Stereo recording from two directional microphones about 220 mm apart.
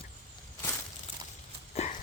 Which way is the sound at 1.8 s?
30° left (ahead or behind).